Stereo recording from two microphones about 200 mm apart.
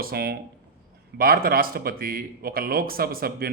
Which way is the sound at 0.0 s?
50° right (ahead or behind).